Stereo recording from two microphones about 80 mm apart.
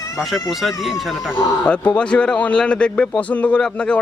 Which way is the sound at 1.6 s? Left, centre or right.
Centre.